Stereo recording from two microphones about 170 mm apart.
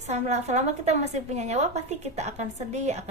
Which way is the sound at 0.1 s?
40° right (ahead or behind).